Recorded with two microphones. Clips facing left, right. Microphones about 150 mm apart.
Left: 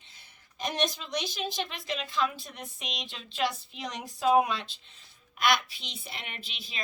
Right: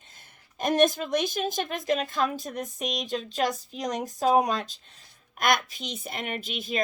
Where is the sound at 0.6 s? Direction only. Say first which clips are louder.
Right 9 dB; 50° right (ahead or behind).